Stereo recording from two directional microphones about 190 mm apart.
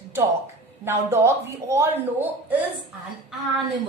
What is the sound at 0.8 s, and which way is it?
Speech, 15° right (ahead or behind).